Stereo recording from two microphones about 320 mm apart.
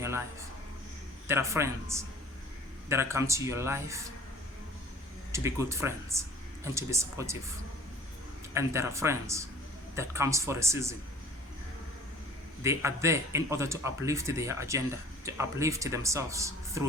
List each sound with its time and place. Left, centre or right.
1.3 s speech: centre
5.3 s speech: centre
8.5 s speech: centre
12.6 s speech: centre